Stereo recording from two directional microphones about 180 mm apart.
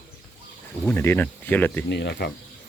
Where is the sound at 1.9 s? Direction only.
70° left (ahead or behind).